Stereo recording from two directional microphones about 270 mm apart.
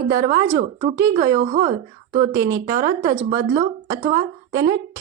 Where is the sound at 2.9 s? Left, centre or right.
Centre.